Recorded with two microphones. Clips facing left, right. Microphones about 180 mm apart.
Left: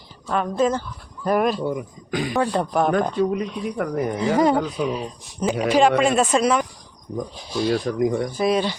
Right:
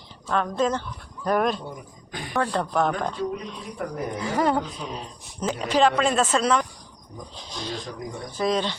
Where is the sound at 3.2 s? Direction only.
75° left (ahead or behind).